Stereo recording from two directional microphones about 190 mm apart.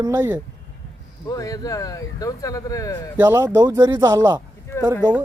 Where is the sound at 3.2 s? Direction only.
15° right (ahead or behind).